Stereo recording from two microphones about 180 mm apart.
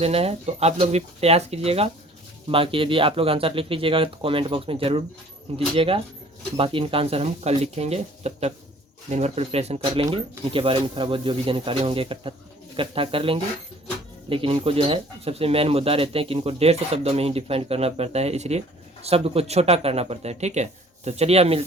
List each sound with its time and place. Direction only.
0.0 s speech: 35° right (ahead or behind)